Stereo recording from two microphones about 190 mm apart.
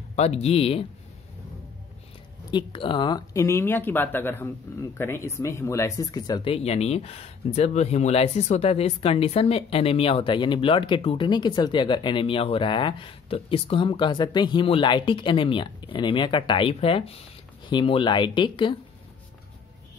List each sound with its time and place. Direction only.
0.1 s speech: 35° left (ahead or behind)
2.5 s speech: 25° left (ahead or behind)